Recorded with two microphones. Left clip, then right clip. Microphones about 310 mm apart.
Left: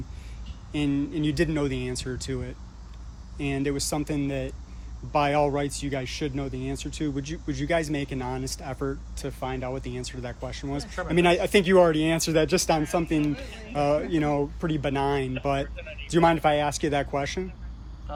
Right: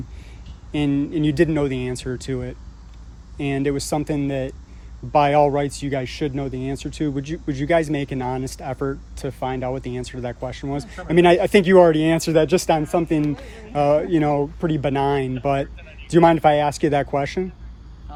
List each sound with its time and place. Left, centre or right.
0.7 s speech: right